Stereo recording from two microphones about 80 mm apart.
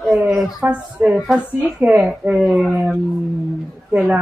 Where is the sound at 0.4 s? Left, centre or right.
Centre.